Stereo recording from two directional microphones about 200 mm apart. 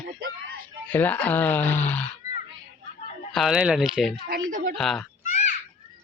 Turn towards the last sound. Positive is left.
turn(degrees=35)  # may be behind; listen again after turning